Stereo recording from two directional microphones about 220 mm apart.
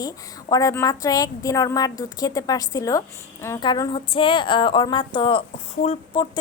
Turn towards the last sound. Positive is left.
turn(degrees=25)  # may be behind; listen again after turning